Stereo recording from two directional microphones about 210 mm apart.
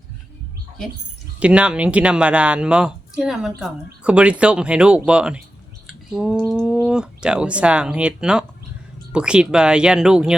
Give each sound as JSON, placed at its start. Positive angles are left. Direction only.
{"t": 1.4, "sound": "speech", "side_deg": -5}